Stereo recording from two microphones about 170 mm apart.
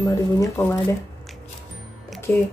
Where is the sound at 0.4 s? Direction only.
15° left (ahead or behind).